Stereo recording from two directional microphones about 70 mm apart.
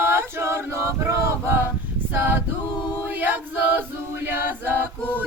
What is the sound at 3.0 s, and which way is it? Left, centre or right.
Choir, right.